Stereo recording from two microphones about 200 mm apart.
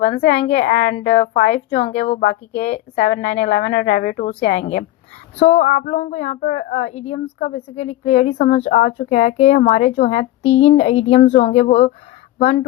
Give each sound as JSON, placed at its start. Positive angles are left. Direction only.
{"t": 0.0, "sound": "a woman's voice", "side_deg": 45}
{"t": 4.6, "sound": "a woman's voice", "side_deg": 35}